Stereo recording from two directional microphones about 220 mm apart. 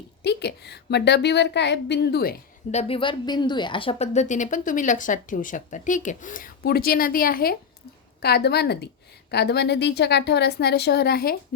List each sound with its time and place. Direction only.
0.2 s a woman's voice: 50° left (ahead or behind)
2.7 s a woman's voice: 25° left (ahead or behind); by 11.3 s 45° left (ahead or behind)